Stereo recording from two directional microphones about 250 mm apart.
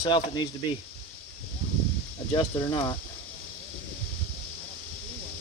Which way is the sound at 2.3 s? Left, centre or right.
Centre.